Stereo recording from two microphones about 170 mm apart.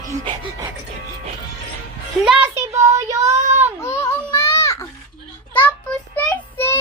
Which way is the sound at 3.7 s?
15° left (ahead or behind).